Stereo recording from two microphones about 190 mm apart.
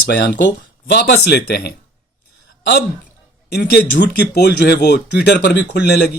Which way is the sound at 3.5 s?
55° left (ahead or behind).